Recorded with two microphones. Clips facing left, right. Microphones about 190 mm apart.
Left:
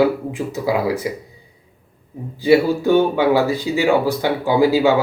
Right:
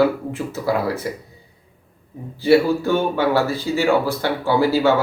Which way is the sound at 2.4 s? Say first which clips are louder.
Left 1 dB; 15° left (ahead or behind).